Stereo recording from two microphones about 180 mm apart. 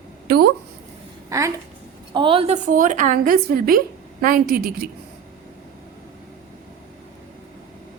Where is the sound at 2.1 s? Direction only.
30° right (ahead or behind).